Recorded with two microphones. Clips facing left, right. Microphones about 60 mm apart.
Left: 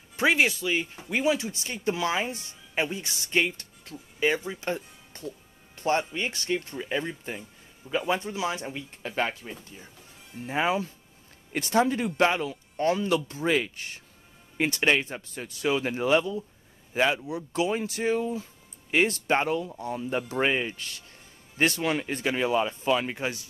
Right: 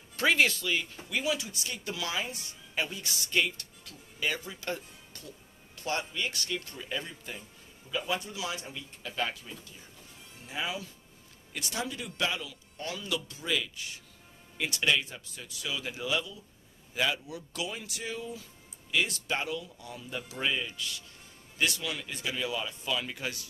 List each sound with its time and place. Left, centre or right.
0.1 s speech: centre